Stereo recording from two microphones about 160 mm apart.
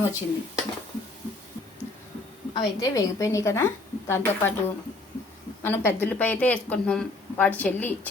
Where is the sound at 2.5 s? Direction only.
20° left (ahead or behind).